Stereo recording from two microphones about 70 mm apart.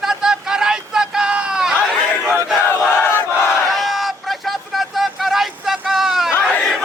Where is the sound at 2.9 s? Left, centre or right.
Left.